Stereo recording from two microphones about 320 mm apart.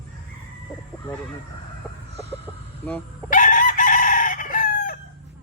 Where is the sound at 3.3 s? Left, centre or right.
Left.